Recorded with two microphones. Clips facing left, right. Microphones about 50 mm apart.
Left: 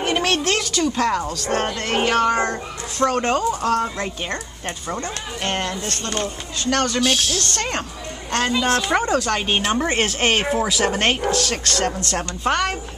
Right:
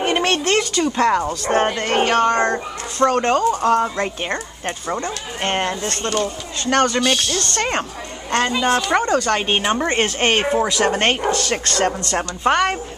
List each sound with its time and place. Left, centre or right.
0.0 s a woman's voice: centre
1.9 s a woman's voice: centre
7.0 s speech: centre
7.5 s speech: centre
8.3 s a woman's voice: centre
9.4 s a woman's voice: centre